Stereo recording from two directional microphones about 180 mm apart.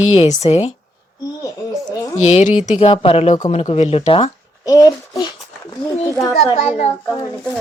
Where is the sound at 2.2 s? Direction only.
40° left (ahead or behind).